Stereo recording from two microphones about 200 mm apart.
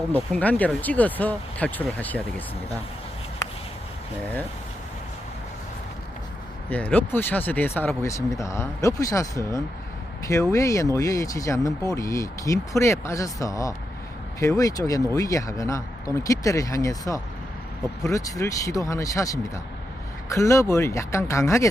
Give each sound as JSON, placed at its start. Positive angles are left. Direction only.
{"t": 0.1, "sound": "speech", "side_deg": 5}
{"t": 6.7, "sound": "speech", "side_deg": 10}